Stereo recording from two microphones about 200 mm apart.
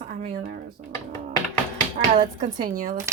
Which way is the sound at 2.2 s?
40° right (ahead or behind).